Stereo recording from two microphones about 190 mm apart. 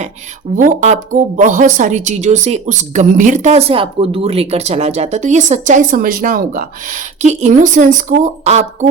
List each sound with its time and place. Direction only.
0.5 s speech: 40° right (ahead or behind)